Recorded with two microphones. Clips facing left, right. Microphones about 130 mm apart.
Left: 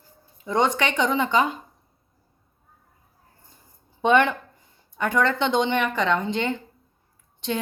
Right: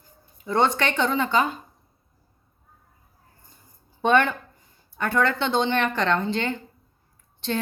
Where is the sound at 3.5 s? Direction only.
20° left (ahead or behind).